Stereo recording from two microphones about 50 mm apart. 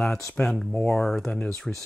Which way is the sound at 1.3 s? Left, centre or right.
Left.